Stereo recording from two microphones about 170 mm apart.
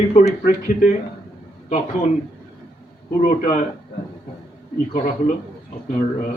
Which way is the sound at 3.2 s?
50° left (ahead or behind).